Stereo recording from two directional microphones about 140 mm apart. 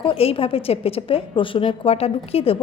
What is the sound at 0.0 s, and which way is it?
A woman's voice, 45° left (ahead or behind).